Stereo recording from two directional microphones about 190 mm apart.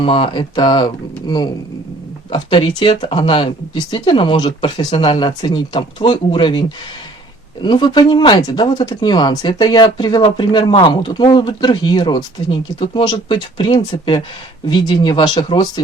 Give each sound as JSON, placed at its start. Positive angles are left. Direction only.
{"t": 0.0, "sound": "speech", "side_deg": 30}
{"t": 2.3, "sound": "speech", "side_deg": 30}